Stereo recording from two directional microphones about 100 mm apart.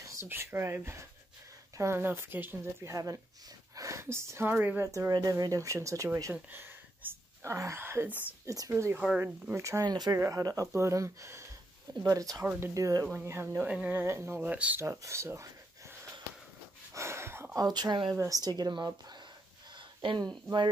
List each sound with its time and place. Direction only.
0.0 s speech: 30° right (ahead or behind)
5.1 s speech: 40° right (ahead or behind)
6.5 s speech: 20° right (ahead or behind)
13.1 s speech: 25° right (ahead or behind)
14.8 s speech: 30° right (ahead or behind)
16.9 s a sound: 25° right (ahead or behind)
17.6 s speech: 45° right (ahead or behind)
18.1 s speech: 30° right (ahead or behind)
18.4 s speech: 45° right (ahead or behind)
20.0 s speech: 55° right (ahead or behind)